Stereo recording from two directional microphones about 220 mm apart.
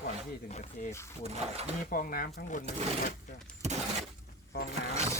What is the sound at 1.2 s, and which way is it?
Speech, 30° right (ahead or behind).